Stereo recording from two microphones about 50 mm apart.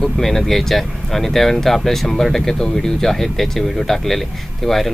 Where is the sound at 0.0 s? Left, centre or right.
Centre.